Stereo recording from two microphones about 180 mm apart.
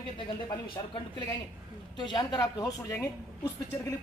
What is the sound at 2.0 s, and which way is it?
A woman's voice, 25° left (ahead or behind).